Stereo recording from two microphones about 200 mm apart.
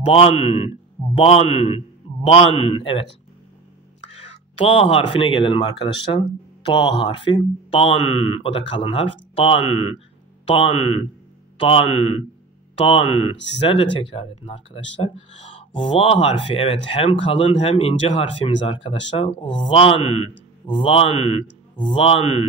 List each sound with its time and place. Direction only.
0.0 s a man's voice: 30° left (ahead or behind)
4.1 s a man's voice: 30° left (ahead or behind)